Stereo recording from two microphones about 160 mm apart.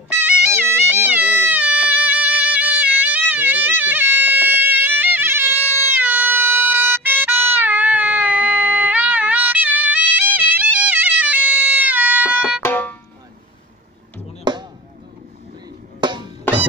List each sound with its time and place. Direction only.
0.1 s music: 10° right (ahead or behind)
12.6 s music: 10° left (ahead or behind)
14.4 s chop: 25° right (ahead or behind)
16.0 s music: 30° right (ahead or behind)